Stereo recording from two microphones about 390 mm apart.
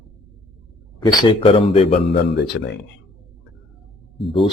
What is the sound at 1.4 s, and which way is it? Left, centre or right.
Speech, centre.